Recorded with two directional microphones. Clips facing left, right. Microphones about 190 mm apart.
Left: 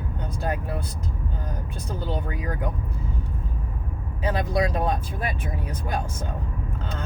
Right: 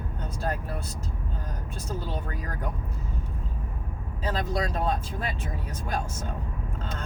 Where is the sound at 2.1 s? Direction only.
15° left (ahead or behind).